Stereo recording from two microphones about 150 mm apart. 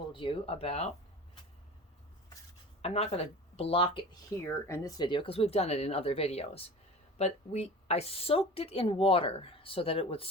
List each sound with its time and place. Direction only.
0.1 s speech: 35° left (ahead or behind)
2.8 s speech: 45° left (ahead or behind)
4.4 s speech: 20° left (ahead or behind); by 10.2 s 40° left (ahead or behind)